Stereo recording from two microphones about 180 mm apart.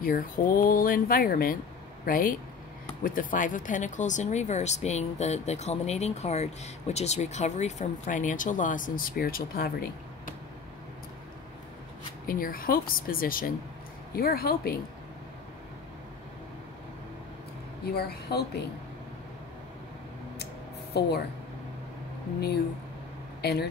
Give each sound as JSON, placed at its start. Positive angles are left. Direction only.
{"t": 0.0, "sound": "speech", "side_deg": 50}
{"t": 12.3, "sound": "speech", "side_deg": 50}
{"t": 17.8, "sound": "speech", "side_deg": 60}
{"t": 20.9, "sound": "speech", "side_deg": 65}
{"t": 23.4, "sound": "speech", "side_deg": 65}